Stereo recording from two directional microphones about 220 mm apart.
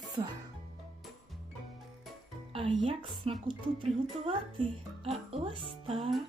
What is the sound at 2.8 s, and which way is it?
Speech, 25° right (ahead or behind).